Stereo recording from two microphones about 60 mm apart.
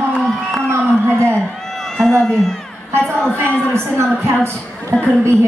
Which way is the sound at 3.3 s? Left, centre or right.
Right.